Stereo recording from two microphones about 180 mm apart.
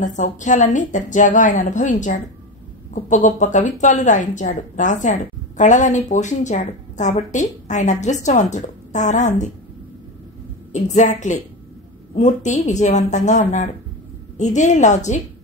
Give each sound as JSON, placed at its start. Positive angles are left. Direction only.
{"t": 0.0, "sound": "a woman's voice", "side_deg": 45}
{"t": 10.7, "sound": "speech", "side_deg": 40}